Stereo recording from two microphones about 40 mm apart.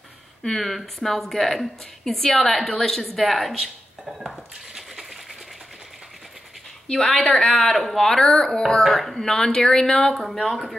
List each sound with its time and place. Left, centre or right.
0.4 s a woman's voice: centre
4.3 s dishes: centre
6.9 s speech: centre
8.1 s a sound: centre
8.6 s a woman's voice: centre
9.2 s speech: centre